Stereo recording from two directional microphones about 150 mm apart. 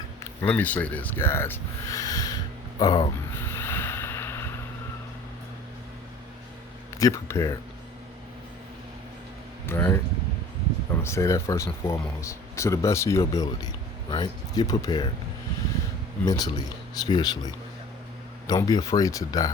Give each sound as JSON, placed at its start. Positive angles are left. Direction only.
{"t": 0.2, "sound": "speech", "side_deg": 10}
{"t": 1.9, "sound": "a sound", "side_deg": 25}
{"t": 3.3, "sound": "boat", "side_deg": 15}
{"t": 7.0, "sound": "speech", "side_deg": 20}
{"t": 9.6, "sound": "speech", "side_deg": 15}
{"t": 11.0, "sound": "speech", "side_deg": 20}
{"t": 16.2, "sound": "speech", "side_deg": 25}